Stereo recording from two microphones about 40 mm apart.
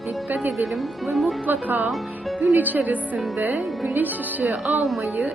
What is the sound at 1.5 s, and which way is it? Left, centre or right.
Speech, right.